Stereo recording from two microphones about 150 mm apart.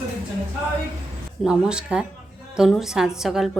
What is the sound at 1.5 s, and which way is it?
A woman's voice, 5° right (ahead or behind).